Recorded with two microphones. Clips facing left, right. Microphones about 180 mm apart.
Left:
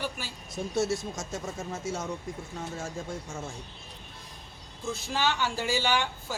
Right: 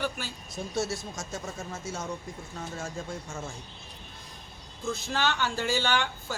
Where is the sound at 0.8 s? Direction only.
20° left (ahead or behind).